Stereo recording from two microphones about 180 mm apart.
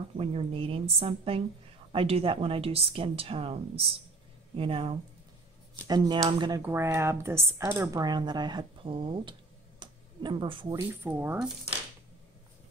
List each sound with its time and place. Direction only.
0.2 s speech: 35° right (ahead or behind)
9.8 s a sound: 25° right (ahead or behind)
10.9 s speech: 10° right (ahead or behind)